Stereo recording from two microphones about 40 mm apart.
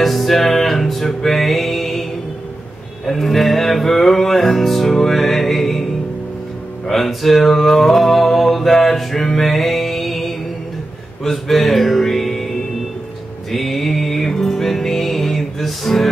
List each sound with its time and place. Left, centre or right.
0.0 s music: centre
3.1 s music: centre
6.9 s a sound: centre
11.2 s music: centre